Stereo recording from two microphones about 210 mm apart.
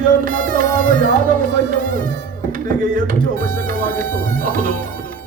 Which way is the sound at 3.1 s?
40° right (ahead or behind).